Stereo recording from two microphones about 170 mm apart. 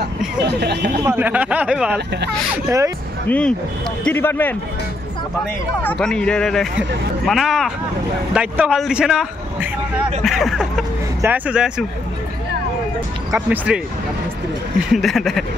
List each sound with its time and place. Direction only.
0.4 s speech: 80° right
1.0 s speech: 10° right (ahead or behind)
3.3 s speech: 5° left (ahead or behind)
5.8 s speech: 5° left (ahead or behind)
11.1 s speech: 10° right (ahead or behind)
13.3 s speech: 10° right (ahead or behind)
14.9 s speech: centre (ahead or behind)